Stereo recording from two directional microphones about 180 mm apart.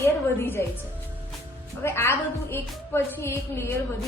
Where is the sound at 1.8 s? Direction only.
15° left (ahead or behind).